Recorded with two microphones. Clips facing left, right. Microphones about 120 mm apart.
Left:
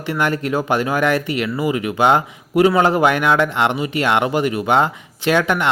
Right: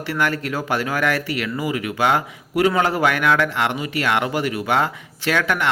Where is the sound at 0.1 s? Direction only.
20° left (ahead or behind).